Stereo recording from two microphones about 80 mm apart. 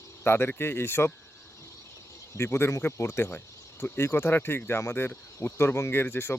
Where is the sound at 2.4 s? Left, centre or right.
Left.